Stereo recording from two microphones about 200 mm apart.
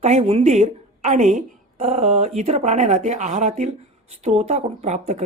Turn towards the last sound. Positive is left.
turn(degrees=-35)  # may be behind; listen again after turning